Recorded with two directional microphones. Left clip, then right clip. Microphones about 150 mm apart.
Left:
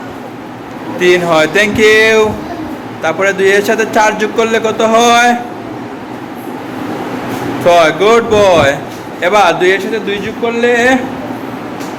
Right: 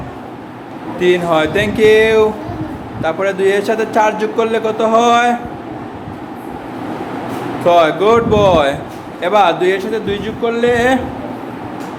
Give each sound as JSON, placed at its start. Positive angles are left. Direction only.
{"t": 0.9, "sound": "speech", "side_deg": -5}
{"t": 7.6, "sound": "speech", "side_deg": -5}